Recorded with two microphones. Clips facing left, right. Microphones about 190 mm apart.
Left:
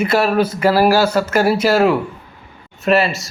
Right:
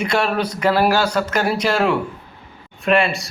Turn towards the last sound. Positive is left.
turn(degrees=5)  # may be behind; listen again after turning